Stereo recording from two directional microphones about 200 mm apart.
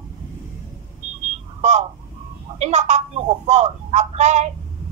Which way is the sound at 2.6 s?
35° right (ahead or behind).